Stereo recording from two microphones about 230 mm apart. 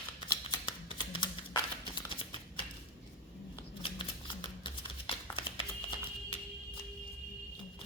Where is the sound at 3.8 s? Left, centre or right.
Left.